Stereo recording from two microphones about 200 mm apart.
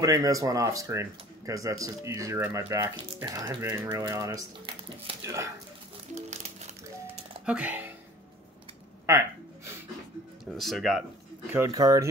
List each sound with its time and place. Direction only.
0.0 s speech: 15° right (ahead or behind)
6.1 s music: 35° right (ahead or behind)
7.4 s speech: 5° right (ahead or behind)
10.5 s speech: centre (ahead or behind)
11.5 s speech: 15° right (ahead or behind)